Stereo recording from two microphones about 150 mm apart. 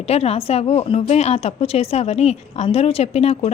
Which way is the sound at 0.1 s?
45° left (ahead or behind).